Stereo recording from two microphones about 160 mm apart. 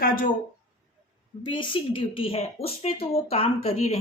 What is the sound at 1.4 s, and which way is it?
Speech, 30° left (ahead or behind).